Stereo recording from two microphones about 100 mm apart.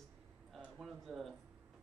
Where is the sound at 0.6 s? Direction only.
10° right (ahead or behind).